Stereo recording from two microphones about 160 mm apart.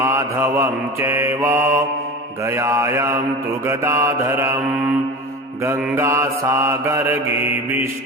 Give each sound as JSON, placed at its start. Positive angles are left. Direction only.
{"t": 0.0, "sound": "mantra", "side_deg": -15}